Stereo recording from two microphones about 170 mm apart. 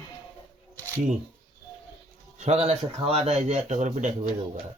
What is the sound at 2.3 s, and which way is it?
Speech, 40° right (ahead or behind).